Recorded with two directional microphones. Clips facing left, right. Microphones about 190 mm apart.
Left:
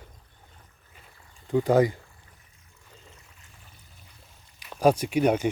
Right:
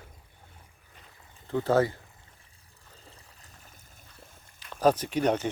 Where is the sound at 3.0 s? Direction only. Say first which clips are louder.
Even; 35° right (ahead or behind).